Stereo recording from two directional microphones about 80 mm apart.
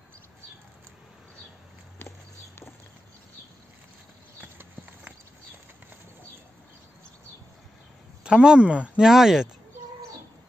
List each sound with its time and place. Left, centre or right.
4.4 s clip-clop: centre
8.2 s speech: centre